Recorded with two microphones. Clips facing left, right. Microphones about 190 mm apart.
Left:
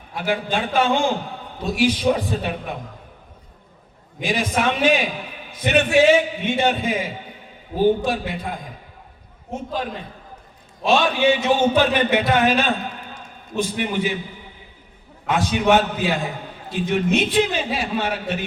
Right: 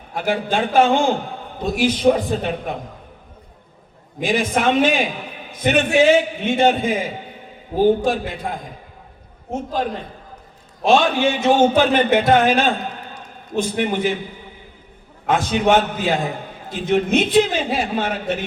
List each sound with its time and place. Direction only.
0.1 s a man's voice: 50° right (ahead or behind)
4.2 s a man's voice: 50° right (ahead or behind)
8.0 s a man's voice: 50° right (ahead or behind)
10.8 s a man's voice: 50° right (ahead or behind)
15.3 s a man's voice: 50° right (ahead or behind)